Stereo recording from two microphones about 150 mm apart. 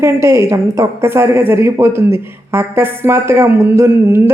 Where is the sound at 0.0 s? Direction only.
20° right (ahead or behind).